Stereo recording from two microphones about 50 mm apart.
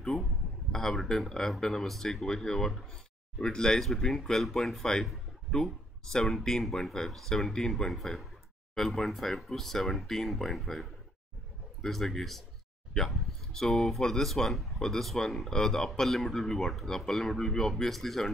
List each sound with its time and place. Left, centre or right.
0.7 s speech: centre
6.1 s speech: centre